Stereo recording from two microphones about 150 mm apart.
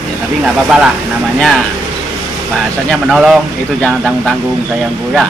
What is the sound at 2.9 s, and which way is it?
Speech, centre (ahead or behind).